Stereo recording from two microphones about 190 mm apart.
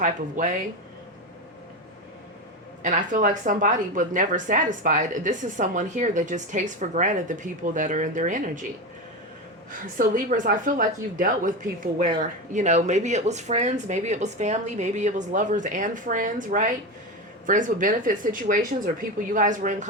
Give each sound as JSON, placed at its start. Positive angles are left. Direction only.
{"t": 0.0, "sound": "a woman's voice", "side_deg": -40}
{"t": 2.8, "sound": "a woman's voice", "side_deg": -40}
{"t": 10.0, "sound": "a woman's voice", "side_deg": -45}